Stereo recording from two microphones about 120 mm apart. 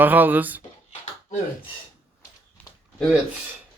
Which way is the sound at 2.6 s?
15° left (ahead or behind).